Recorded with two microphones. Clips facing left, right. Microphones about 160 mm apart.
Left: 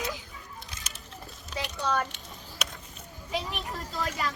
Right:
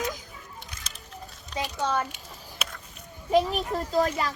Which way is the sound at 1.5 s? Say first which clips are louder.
Right 2 dB; 20° right (ahead or behind).